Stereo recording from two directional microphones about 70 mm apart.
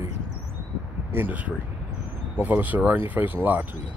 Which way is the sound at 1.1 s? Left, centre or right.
Right.